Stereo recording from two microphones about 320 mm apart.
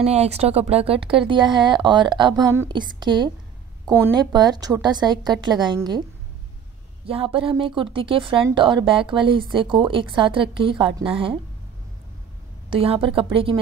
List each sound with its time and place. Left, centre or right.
0.0 s speech: centre
7.1 s speech: centre
12.6 s speech: centre